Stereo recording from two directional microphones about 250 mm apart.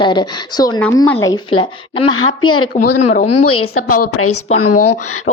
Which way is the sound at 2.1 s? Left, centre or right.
Left.